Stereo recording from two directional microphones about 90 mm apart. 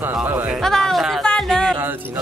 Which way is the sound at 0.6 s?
5° left (ahead or behind).